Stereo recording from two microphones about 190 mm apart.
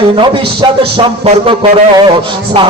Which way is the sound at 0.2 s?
25° right (ahead or behind).